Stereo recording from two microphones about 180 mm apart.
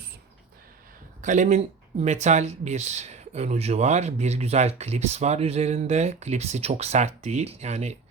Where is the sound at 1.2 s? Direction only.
45° right (ahead or behind).